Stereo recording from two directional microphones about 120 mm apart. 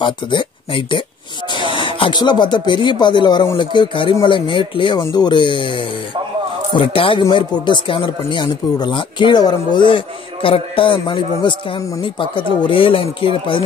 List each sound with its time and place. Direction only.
0.0 s speech: 45° left (ahead or behind)